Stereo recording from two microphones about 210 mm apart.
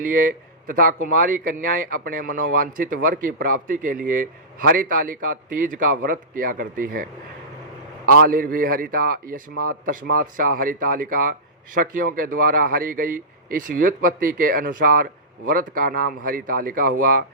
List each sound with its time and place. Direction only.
0.7 s a man's voice: 40° right (ahead or behind)